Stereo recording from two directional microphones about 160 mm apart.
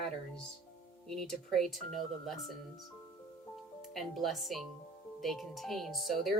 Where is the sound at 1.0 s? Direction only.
5° left (ahead or behind).